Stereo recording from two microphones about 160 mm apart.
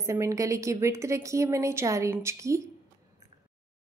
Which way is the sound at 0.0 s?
20° right (ahead or behind).